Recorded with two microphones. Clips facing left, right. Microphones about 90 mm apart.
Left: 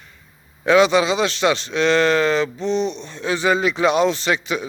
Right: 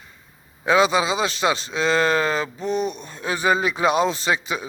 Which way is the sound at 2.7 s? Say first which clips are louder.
Left 3 dB; 45° right (ahead or behind).